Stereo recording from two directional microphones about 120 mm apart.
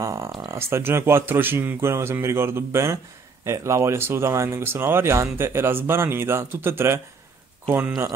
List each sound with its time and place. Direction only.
0.0 s speech: 25° right (ahead or behind)